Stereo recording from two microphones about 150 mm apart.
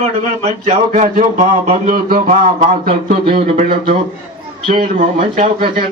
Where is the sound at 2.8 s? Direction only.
40° right (ahead or behind).